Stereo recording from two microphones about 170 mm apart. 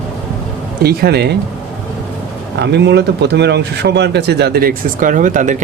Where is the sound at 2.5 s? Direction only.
85° right.